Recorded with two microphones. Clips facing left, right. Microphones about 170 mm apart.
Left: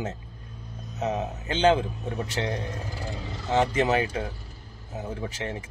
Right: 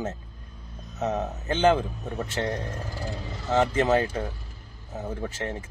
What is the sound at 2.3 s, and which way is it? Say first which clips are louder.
A man's voice: right 1 dB; 15° left (ahead or behind).